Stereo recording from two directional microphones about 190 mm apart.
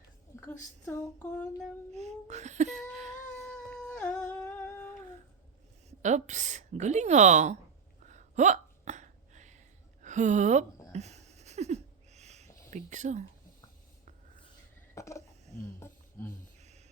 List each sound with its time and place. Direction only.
0.3 s a sound: 15° left (ahead or behind)
0.9 s female singing: 5° left (ahead or behind)
1.9 s a woman's voice: 35° right (ahead or behind)
3.5 s humming: 5° left (ahead or behind)
6.0 s a woman's voice: 40° right (ahead or behind)
8.0 s hiccup: 40° right (ahead or behind)
10.0 s a woman's voice: 40° right (ahead or behind)
10.9 s a sound: 35° right (ahead or behind)
14.9 s a sound: 15° left (ahead or behind)